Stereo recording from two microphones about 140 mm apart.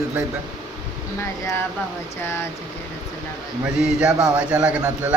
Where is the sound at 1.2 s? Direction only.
20° left (ahead or behind).